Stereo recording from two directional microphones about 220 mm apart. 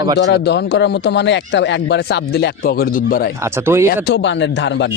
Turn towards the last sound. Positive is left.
turn(degrees=55)  # may be behind; listen again after turning